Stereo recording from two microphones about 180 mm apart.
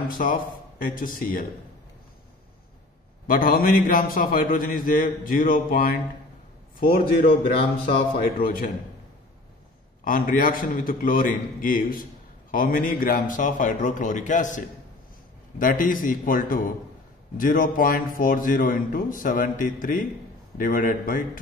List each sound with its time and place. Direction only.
0.1 s a man's voice: 50° left (ahead or behind)
3.3 s a man's voice: 50° left (ahead or behind)
8.4 s a man's voice: 50° left (ahead or behind)
10.0 s a man's voice: 50° left (ahead or behind)
15.6 s a man's voice: 50° left (ahead or behind)